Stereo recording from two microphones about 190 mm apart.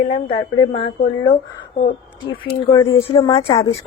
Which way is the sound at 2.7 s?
25° left (ahead or behind).